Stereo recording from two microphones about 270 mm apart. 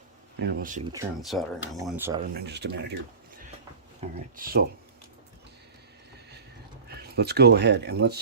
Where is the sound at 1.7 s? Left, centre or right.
Centre.